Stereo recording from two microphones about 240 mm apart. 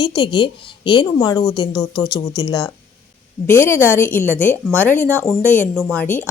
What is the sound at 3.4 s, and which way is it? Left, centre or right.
A woman's voice, centre.